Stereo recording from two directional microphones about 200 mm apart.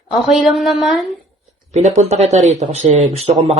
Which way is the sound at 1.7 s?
35° right (ahead or behind).